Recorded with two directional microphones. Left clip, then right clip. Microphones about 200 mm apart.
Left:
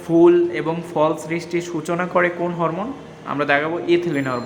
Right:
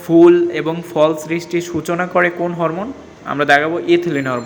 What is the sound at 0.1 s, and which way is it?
A man's voice, 15° right (ahead or behind).